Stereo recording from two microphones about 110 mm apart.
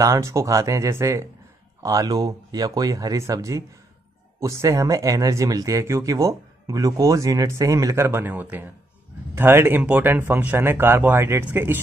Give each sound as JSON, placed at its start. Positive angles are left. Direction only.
{"t": 0.0, "sound": "speech", "side_deg": -30}